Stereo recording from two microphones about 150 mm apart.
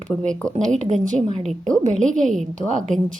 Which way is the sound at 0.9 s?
55° right (ahead or behind).